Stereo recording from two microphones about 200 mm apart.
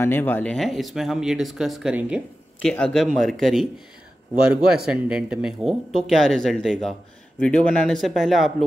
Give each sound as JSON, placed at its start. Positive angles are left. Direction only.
{"t": 0.0, "sound": "speech", "side_deg": 10}
{"t": 4.8, "sound": "speech", "side_deg": -5}